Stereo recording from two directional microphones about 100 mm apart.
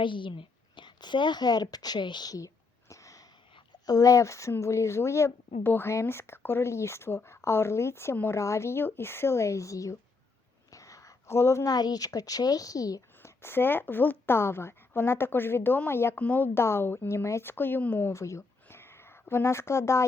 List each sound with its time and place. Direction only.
0.0 s a woman's voice: 55° left (ahead or behind); by 2.5 s 40° left (ahead or behind)
2.9 s sniff: 35° left (ahead or behind)
3.5 s a woman's voice: 45° left (ahead or behind)
10.7 s whispering: 35° left (ahead or behind)
11.7 s a woman's voice: 40° left (ahead or behind)